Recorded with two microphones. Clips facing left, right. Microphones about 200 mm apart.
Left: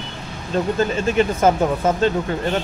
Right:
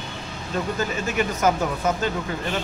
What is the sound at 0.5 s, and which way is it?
Speech, 30° left (ahead or behind).